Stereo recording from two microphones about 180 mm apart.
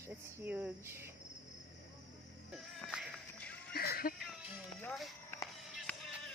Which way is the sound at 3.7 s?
60° left (ahead or behind).